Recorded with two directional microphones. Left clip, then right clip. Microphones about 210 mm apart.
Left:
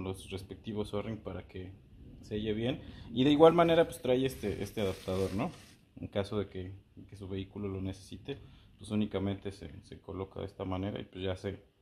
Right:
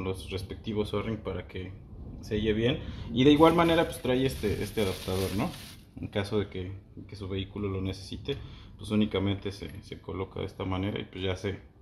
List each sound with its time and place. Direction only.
0.0 s speech: 45° left (ahead or behind)